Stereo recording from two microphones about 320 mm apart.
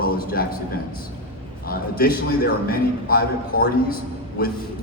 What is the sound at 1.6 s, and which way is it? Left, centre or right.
A man's voice, left.